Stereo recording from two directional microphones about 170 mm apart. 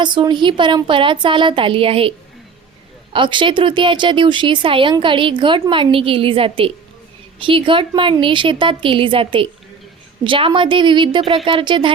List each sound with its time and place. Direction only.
0.0 s speech: 25° right (ahead or behind)